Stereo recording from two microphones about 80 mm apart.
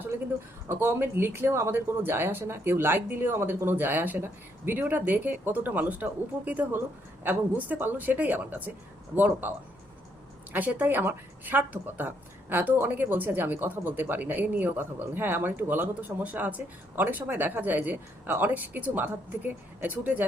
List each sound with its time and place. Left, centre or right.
0.7 s speech: right
10.5 s speech: right